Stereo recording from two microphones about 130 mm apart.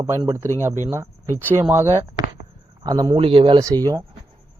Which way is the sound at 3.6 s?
25° right (ahead or behind).